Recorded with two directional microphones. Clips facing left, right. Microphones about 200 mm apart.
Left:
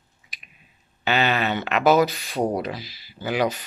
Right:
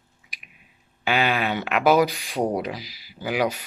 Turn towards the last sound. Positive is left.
turn(degrees=-10)  # may be behind; listen again after turning